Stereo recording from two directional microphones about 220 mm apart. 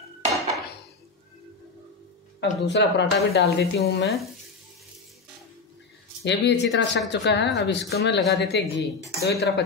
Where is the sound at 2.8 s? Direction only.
55° left (ahead or behind).